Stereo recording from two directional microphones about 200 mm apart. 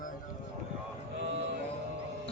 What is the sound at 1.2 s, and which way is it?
Music, 30° right (ahead or behind).